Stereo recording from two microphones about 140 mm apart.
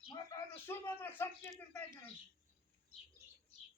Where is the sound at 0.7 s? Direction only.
15° left (ahead or behind).